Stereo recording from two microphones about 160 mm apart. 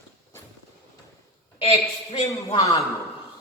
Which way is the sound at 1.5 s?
35° left (ahead or behind).